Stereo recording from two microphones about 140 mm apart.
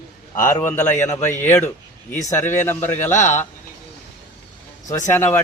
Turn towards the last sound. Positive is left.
turn(degrees=15)  # may be behind; listen again after turning